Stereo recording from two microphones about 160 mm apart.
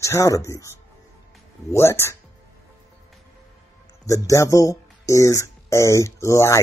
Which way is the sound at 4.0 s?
20° left (ahead or behind).